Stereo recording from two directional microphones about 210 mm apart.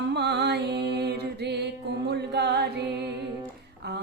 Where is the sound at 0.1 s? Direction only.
55° right (ahead or behind).